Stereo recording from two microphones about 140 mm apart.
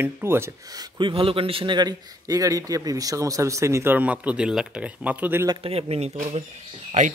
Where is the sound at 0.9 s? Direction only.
35° right (ahead or behind); by 5.5 s 15° right (ahead or behind).